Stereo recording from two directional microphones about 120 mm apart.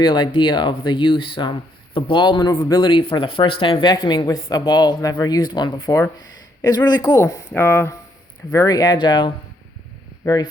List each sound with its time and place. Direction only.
0.0 s speech: 40° left (ahead or behind)
7.5 s speech: 20° left (ahead or behind)
8.5 s speech: 30° left (ahead or behind)